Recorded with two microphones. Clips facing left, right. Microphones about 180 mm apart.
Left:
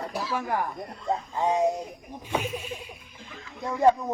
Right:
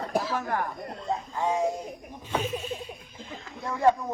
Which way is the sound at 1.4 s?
20° left (ahead or behind).